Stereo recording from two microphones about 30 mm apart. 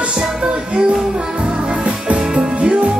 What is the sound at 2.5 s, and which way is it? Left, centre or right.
Music, right.